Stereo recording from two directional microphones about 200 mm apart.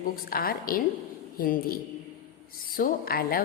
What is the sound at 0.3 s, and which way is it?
A woman's voice, 45° left (ahead or behind).